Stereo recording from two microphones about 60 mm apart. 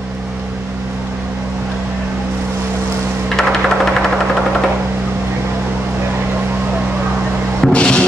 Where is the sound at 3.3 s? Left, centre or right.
Centre.